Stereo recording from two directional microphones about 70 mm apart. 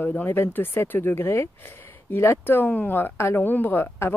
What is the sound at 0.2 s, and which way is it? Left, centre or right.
Speech, left.